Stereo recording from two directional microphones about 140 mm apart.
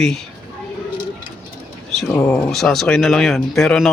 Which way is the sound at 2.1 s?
15° left (ahead or behind).